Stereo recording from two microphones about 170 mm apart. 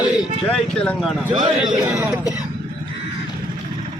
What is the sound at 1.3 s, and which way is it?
Speech, 25° right (ahead or behind).